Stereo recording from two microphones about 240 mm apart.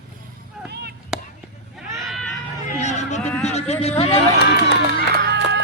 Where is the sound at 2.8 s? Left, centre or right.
Left.